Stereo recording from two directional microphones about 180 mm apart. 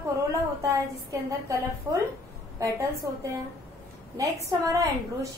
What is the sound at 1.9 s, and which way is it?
A woman's voice, 20° right (ahead or behind).